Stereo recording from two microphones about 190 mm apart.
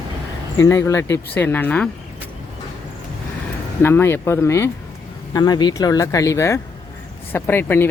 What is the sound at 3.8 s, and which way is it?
Speech, 10° left (ahead or behind).